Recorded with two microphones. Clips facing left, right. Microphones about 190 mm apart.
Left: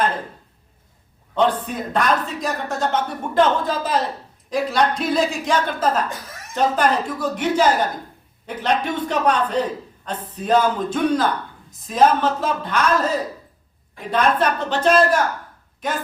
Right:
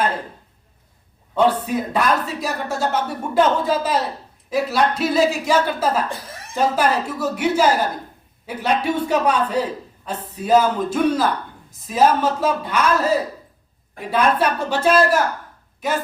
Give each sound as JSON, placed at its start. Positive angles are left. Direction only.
{"t": 1.4, "sound": "a woman's voice", "side_deg": -10}
{"t": 6.1, "sound": "speech", "side_deg": -30}
{"t": 6.5, "sound": "speech", "side_deg": -5}